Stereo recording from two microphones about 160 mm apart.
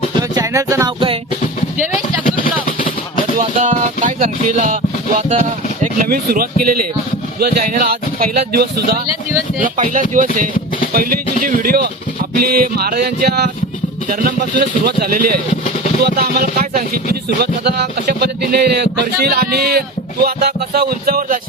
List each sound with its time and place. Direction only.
0.2 s music: 20° right (ahead or behind)
0.9 s music: 35° right (ahead or behind)
3.4 s music: 45° right (ahead or behind)
5.3 s speech: 55° right (ahead or behind)
7.3 s music: 70° right (ahead or behind)
9.6 s speech: 55° right (ahead or behind)
10.9 s music: 65° right (ahead or behind); by 13.5 s 85° right
14.6 s music: 70° right (ahead or behind)
16.0 s music: 80° right; by 21.3 s 65° right (ahead or behind)